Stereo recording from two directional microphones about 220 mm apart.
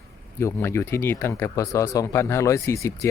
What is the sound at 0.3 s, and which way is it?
Speech, 10° left (ahead or behind).